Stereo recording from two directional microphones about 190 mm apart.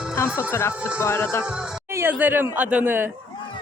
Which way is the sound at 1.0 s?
10° left (ahead or behind).